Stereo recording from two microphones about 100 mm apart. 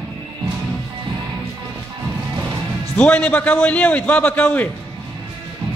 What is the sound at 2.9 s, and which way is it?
A man's voice, 15° left (ahead or behind).